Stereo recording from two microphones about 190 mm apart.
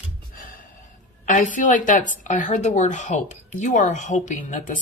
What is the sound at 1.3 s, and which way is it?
A woman's voice, 45° left (ahead or behind).